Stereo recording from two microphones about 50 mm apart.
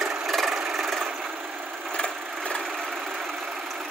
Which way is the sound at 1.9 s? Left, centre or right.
Left.